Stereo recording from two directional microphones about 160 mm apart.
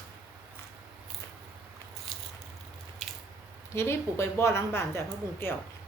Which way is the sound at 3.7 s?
15° left (ahead or behind).